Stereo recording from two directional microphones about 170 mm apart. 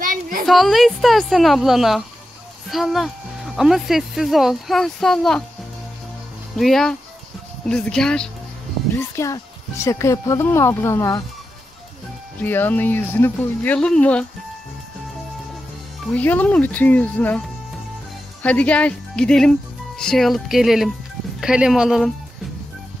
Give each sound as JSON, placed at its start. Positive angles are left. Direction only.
{"t": 0.0, "sound": "a sound", "side_deg": -55}
{"t": 0.5, "sound": "speech", "side_deg": 0}
{"t": 6.5, "sound": "speech", "side_deg": 0}
{"t": 9.1, "sound": "speech", "side_deg": 15}
{"t": 12.4, "sound": "speech", "side_deg": 10}
{"t": 16.2, "sound": "speech", "side_deg": 10}
{"t": 18.4, "sound": "speech", "side_deg": 10}